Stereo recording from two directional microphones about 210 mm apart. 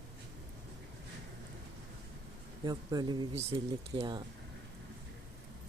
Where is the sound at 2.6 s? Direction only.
20° right (ahead or behind).